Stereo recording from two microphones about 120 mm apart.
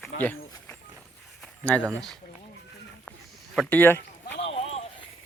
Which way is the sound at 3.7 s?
15° left (ahead or behind).